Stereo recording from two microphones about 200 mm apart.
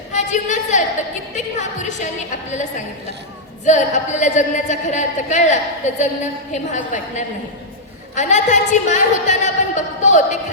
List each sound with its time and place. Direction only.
0.1 s a sound: 35° left (ahead or behind)
1.4 s music: 35° left (ahead or behind)
3.7 s a man's voice: 35° left (ahead or behind)